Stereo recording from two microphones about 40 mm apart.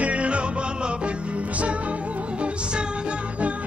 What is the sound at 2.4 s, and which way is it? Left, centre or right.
Music, right.